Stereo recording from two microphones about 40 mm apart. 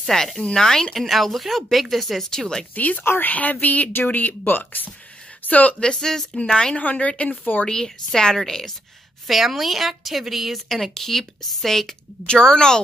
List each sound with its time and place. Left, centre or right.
0.1 s a woman's voice: centre
2.3 s a woman's voice: centre
2.7 s speech: left
5.4 s speech: left
5.8 s speech: centre
6.8 s speech: left
7.6 s a woman's voice: centre
9.3 s a woman's voice: centre
12.3 s speech: centre